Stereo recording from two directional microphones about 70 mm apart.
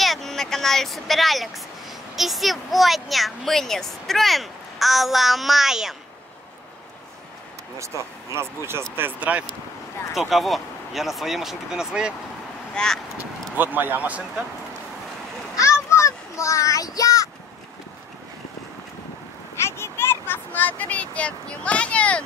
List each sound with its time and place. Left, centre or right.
0.0 s speech: centre
7.8 s speech: right
10.1 s speech: centre
12.7 s speech: centre
13.6 s speech: right
15.5 s a sound: left
19.6 s speech: left; by 22.2 s centre